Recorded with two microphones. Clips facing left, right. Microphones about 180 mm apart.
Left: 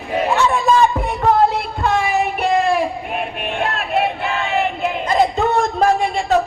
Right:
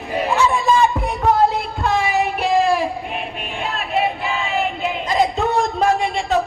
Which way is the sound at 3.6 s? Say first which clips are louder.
Left 1 dB; centre (ahead or behind).